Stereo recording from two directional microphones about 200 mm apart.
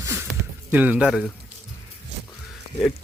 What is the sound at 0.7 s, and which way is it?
Speech, 10° right (ahead or behind).